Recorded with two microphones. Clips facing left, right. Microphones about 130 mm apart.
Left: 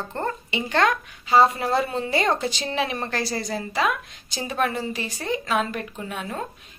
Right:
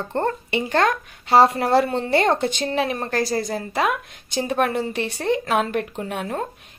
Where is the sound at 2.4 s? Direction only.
55° right (ahead or behind).